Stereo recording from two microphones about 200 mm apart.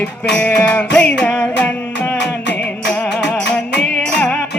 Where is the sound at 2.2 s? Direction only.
60° left (ahead or behind).